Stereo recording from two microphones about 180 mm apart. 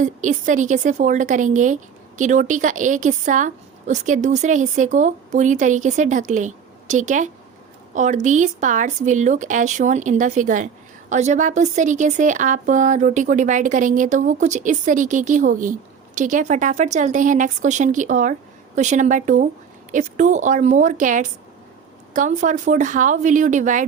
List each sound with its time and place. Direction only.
0.0 s a woman's voice: 45° right (ahead or behind)